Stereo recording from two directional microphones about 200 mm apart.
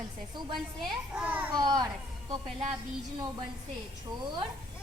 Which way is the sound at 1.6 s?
20° right (ahead or behind).